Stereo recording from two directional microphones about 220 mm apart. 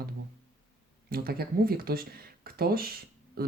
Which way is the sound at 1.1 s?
45° right (ahead or behind).